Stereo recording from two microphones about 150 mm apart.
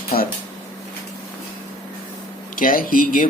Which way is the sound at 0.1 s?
80° left.